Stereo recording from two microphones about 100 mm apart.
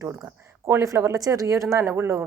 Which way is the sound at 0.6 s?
30° right (ahead or behind).